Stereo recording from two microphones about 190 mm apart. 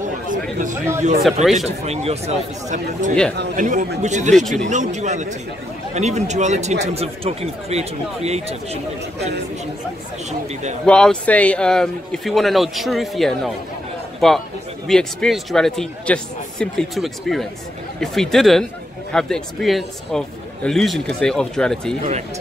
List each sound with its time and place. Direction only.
0.3 s speech: 45° right (ahead or behind)
1.2 s a man's voice: centre (ahead or behind)
1.8 s speech: 35° right (ahead or behind)
10.9 s a man's voice: 5° left (ahead or behind)